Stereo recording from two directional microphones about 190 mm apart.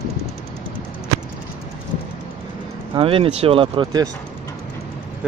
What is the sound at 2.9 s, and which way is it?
Speech, 30° right (ahead or behind).